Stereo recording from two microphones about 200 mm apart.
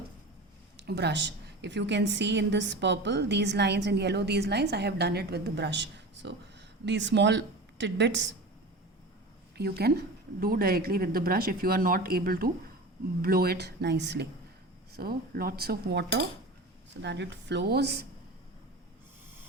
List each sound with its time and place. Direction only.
0.8 s a woman's voice: 55° right (ahead or behind)
9.6 s a woman's voice: 50° right (ahead or behind)